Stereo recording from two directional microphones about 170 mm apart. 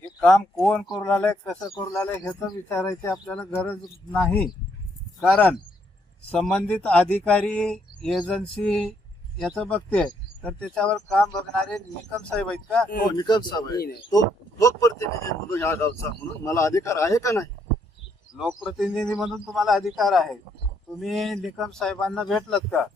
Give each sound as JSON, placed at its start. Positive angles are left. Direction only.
{"t": 0.2, "sound": "a man's voice", "side_deg": 5}
{"t": 6.3, "sound": "a man's voice", "side_deg": 5}
{"t": 13.1, "sound": "speech", "side_deg": 25}
{"t": 18.3, "sound": "a man's voice", "side_deg": 0}